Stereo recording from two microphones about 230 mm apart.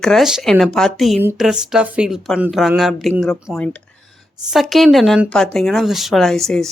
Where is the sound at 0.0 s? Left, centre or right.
Centre.